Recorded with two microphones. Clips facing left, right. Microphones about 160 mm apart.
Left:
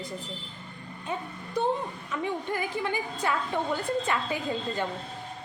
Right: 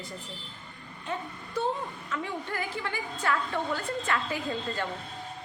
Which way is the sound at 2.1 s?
15° left (ahead or behind).